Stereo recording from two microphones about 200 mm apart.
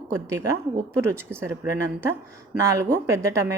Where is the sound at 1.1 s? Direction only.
15° right (ahead or behind).